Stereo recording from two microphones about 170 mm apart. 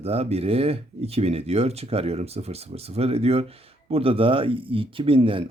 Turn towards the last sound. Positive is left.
turn(degrees=-30)  # may be behind; listen again after turning